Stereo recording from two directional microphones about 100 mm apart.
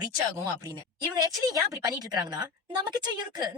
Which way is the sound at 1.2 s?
40° right (ahead or behind).